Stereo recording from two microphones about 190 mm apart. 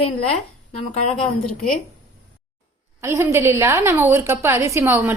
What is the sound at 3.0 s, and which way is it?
A woman's voice, 15° right (ahead or behind).